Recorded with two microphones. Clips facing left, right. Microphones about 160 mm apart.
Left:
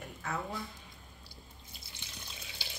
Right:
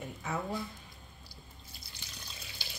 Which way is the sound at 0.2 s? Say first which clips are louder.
Right 2 dB; 10° right (ahead or behind).